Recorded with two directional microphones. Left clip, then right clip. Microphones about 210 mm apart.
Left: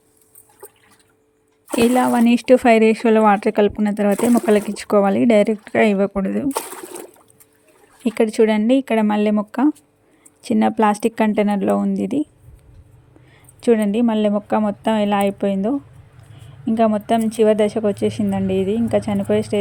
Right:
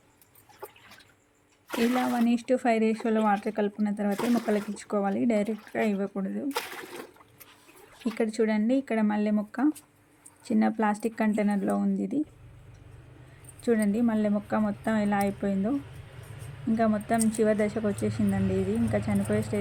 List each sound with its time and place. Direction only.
2.0 s speech: 50° left (ahead or behind)
8.0 s a woman's voice: 45° left (ahead or behind)
13.6 s a woman's voice: 40° left (ahead or behind)
16.7 s a woman's voice: 35° left (ahead or behind)